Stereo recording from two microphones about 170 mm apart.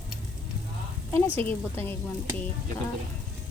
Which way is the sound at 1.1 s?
10° left (ahead or behind).